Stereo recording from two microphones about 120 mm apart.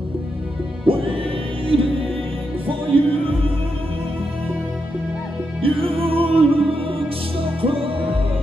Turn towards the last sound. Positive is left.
turn(degrees=-50)  # may be behind; listen again after turning